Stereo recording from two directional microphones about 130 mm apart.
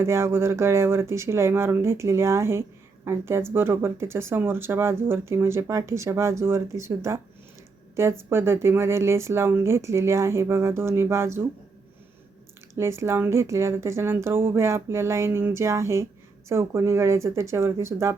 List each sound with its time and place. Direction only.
0.0 s speech: 20° right (ahead or behind)
12.7 s speech: 20° right (ahead or behind)